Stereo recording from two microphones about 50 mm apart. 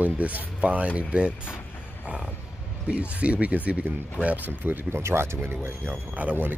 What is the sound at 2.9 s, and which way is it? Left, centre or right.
Speech, right.